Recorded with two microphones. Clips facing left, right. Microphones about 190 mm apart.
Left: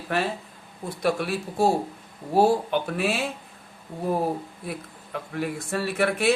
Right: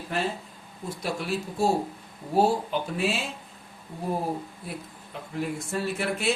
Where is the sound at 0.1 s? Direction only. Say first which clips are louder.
Left 3 dB; 65° left (ahead or behind).